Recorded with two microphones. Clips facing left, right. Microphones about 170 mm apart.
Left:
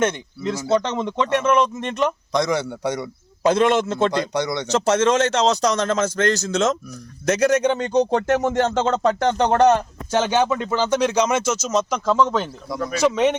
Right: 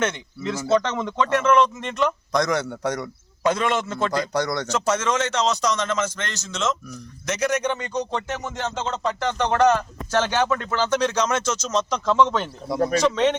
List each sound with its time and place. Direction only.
0.0 s speech: 15° left (ahead or behind)
2.3 s speech: centre (ahead or behind)
3.0 s a man's voice: 25° left (ahead or behind)
4.1 s speech: centre (ahead or behind)
4.6 s a man's voice: 25° left (ahead or behind)
8.1 s music: 55° left (ahead or behind)
9.4 s a man's voice: 35° left (ahead or behind)
10.1 s speech: 15° left (ahead or behind)
12.6 s speech: 25° right (ahead or behind)
13.0 s speech: 10° left (ahead or behind)